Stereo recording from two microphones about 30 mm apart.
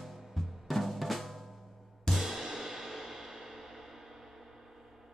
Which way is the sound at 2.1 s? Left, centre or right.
Centre.